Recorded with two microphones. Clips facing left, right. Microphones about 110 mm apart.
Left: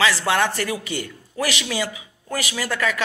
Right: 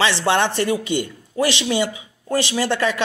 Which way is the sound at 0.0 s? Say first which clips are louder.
Right 2 dB; 25° right (ahead or behind).